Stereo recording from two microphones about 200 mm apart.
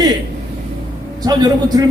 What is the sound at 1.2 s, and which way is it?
Speech, 20° right (ahead or behind).